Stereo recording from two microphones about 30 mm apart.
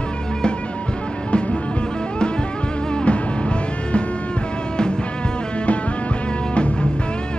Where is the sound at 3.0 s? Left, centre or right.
Left.